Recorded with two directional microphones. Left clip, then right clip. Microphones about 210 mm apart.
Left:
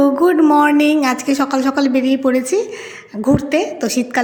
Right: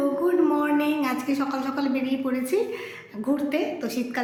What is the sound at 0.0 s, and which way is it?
A woman's voice, 40° left (ahead or behind).